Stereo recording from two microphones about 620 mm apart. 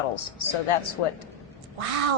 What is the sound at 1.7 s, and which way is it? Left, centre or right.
Speech, right.